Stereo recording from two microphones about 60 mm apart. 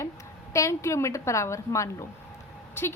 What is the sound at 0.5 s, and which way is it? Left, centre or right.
Speech, left.